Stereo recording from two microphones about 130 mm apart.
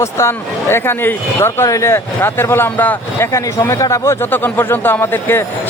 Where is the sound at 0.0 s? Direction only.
20° left (ahead or behind).